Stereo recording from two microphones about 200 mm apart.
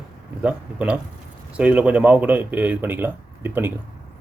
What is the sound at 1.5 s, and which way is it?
Speech, 5° right (ahead or behind).